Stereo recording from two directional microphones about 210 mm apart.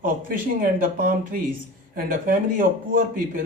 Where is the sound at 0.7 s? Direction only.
40° right (ahead or behind).